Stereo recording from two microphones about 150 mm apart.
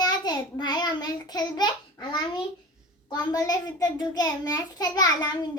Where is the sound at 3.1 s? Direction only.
25° left (ahead or behind).